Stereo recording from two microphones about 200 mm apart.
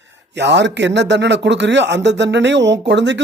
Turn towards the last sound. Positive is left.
turn(degrees=-60)  # may be behind; listen again after turning